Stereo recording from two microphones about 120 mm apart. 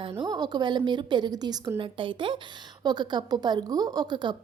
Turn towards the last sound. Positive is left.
turn(degrees=-40)  # may be behind; listen again after turning